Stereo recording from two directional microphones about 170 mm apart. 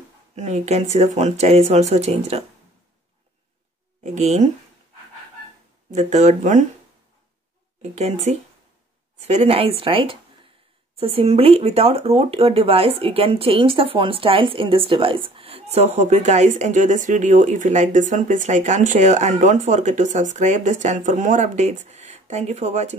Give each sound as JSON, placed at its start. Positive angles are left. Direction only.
{"t": 0.4, "sound": "speech", "side_deg": -40}
{"t": 4.0, "sound": "speech", "side_deg": -40}
{"t": 5.9, "sound": "speech", "side_deg": -45}
{"t": 7.8, "sound": "speech", "side_deg": -40}